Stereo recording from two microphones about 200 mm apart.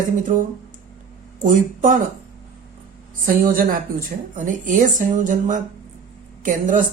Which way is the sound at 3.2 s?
45° right (ahead or behind).